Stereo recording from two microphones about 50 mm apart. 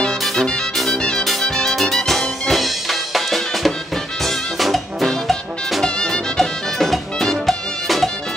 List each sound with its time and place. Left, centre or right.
0.9 s music: centre
5.9 s music: centre